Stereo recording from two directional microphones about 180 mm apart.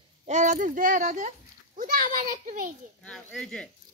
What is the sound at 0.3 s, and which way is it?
A child's voice, 40° right (ahead or behind).